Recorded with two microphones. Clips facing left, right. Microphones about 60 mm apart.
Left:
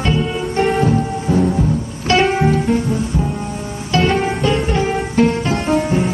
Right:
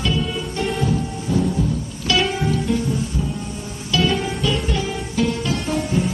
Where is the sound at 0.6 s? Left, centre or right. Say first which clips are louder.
Left 7 dB; left.